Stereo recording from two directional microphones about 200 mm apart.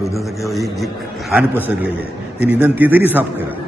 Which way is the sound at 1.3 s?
10° right (ahead or behind).